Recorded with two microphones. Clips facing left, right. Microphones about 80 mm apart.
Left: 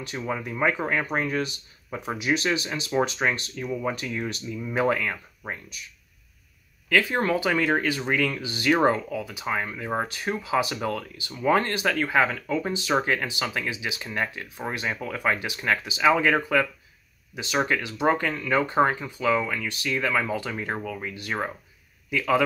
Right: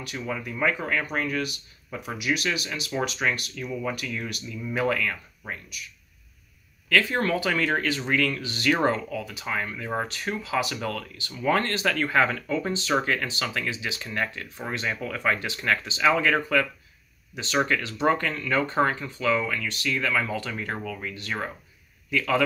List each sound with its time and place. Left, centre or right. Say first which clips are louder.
0.0 s speech: left 2 dB; left
6.9 s speech: left 1 dB; centre
17.6 s speech: even; centre